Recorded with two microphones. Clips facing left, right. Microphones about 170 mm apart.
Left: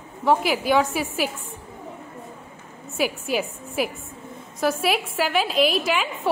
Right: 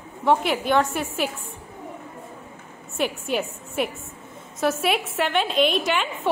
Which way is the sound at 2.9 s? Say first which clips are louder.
Left 1 dB; 5° left (ahead or behind).